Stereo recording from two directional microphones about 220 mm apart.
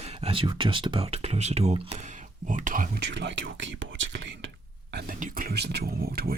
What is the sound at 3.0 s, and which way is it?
Speech, 50° right (ahead or behind).